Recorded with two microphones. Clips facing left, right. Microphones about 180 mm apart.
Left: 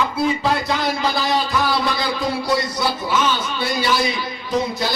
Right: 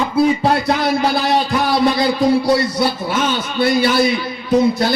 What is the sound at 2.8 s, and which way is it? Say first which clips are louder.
A man's voice: right 3 dB; 55° right (ahead or behind).